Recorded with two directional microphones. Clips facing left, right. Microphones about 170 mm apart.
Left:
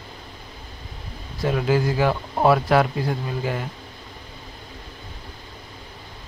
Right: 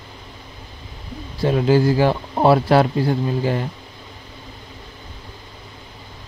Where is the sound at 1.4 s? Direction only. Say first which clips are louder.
Right 5 dB; 30° right (ahead or behind).